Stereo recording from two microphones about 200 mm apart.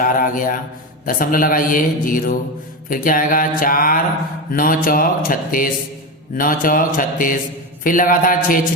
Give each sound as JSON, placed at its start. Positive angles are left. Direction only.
{"t": 0.0, "sound": "a man's voice", "side_deg": 45}